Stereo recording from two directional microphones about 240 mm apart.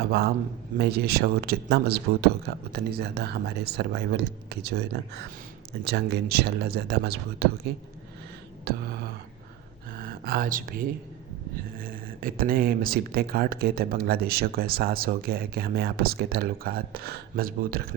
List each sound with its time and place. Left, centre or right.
0.8 s speech: right
5.8 s speech: right
10.0 s speech: right